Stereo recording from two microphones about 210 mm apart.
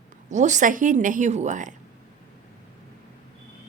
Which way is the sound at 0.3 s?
35° right (ahead or behind).